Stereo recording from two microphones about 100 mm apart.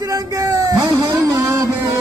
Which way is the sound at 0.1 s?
35° right (ahead or behind).